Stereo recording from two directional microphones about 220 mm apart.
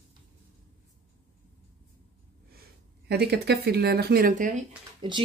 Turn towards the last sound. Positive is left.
turn(degrees=-20)  # may be behind; listen again after turning